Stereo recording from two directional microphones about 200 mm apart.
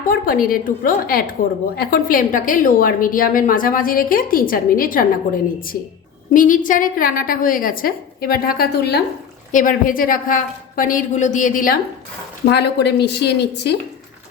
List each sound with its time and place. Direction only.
0.1 s a woman's voice: 45° left (ahead or behind)
6.3 s a woman's voice: 40° left (ahead or behind)
9.5 s a woman's voice: 40° left (ahead or behind)
12.5 s a woman's voice: 60° left (ahead or behind)